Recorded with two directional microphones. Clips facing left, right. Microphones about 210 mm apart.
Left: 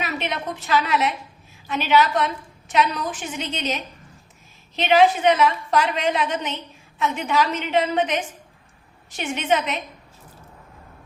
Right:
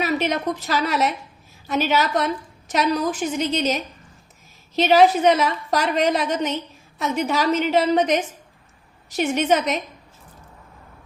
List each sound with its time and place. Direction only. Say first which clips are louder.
0.0 s a woman's voice: right 6 dB; 40° right (ahead or behind)